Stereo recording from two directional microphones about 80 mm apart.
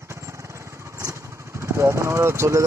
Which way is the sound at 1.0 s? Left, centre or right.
Right.